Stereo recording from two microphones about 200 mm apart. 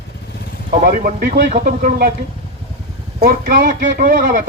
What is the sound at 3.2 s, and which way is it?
Speech, 40° right (ahead or behind).